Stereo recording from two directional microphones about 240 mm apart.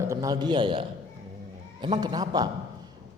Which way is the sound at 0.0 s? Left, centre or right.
Centre.